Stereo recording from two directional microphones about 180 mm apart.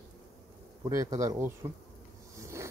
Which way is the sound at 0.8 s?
20° right (ahead or behind).